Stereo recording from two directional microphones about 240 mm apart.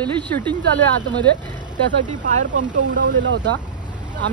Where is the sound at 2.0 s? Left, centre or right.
Right.